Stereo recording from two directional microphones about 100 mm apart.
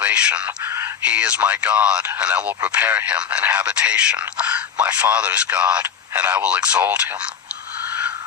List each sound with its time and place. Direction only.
0.0 s speech: 10° right (ahead or behind)
0.6 s speech: 25° right (ahead or behind)
1.0 s speech: 10° right (ahead or behind)